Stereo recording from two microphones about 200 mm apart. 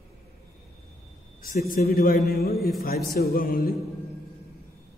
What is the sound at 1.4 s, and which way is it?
A man's voice, 45° left (ahead or behind).